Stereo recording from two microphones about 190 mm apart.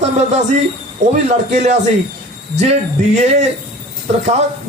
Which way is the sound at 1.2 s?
35° right (ahead or behind).